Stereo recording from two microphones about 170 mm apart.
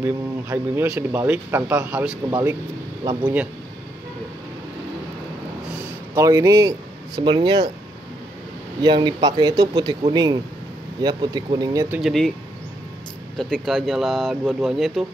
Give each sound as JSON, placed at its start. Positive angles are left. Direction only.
{"t": 0.0, "sound": "speech", "side_deg": -15}
{"t": 6.1, "sound": "speech", "side_deg": -20}
{"t": 8.8, "sound": "speech", "side_deg": -25}
{"t": 12.0, "sound": "speech", "side_deg": 0}
{"t": 13.4, "sound": "speech", "side_deg": 0}